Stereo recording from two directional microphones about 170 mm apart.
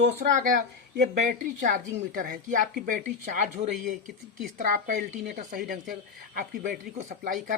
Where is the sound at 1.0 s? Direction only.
50° right (ahead or behind).